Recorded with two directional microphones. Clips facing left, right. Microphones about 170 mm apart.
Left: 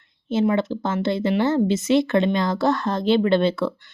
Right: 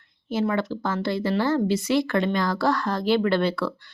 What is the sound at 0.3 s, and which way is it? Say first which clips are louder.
Speech: left 4 dB; 25° left (ahead or behind).